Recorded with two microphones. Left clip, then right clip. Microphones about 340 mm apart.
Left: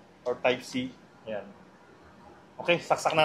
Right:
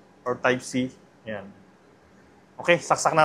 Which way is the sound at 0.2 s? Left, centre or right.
Right.